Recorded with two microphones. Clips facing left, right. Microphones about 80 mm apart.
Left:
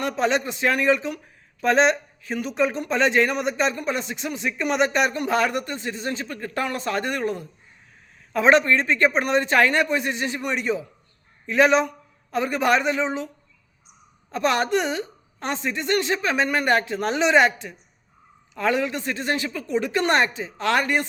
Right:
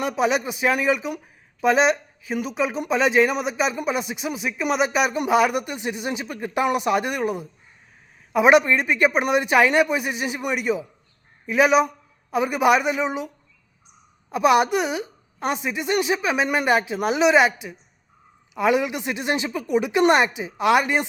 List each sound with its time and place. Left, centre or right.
0.0 s a man's voice: centre